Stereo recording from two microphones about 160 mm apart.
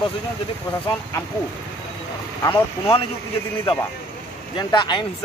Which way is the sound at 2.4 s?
30° left (ahead or behind).